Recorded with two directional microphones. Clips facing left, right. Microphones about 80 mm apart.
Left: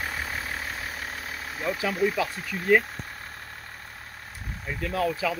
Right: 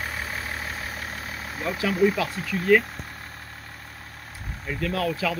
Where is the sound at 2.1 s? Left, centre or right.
Left.